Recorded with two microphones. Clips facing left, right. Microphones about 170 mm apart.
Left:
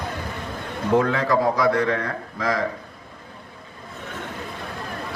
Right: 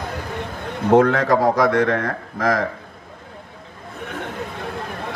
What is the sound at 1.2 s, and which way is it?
A man's voice, 45° right (ahead or behind).